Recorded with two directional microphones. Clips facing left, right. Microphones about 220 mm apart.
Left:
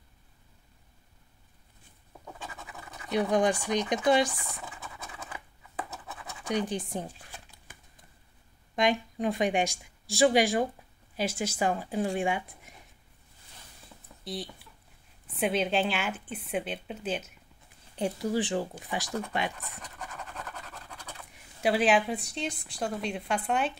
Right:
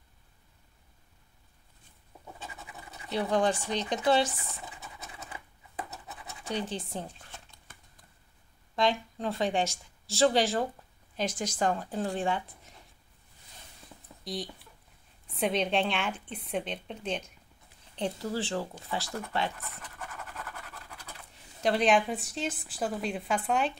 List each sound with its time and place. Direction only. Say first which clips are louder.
3.1 s speech: left 2 dB; 15° left (ahead or behind)
6.5 s speech: left 4 dB; 15° left (ahead or behind)
8.7 s speech: left 2 dB; 15° left (ahead or behind)
14.2 s a woman's voice: right 1 dB; centre (ahead or behind)
21.6 s a woman's voice: left 1 dB; 5° left (ahead or behind)